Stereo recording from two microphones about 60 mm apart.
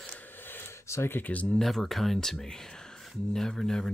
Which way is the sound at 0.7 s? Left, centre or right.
Left.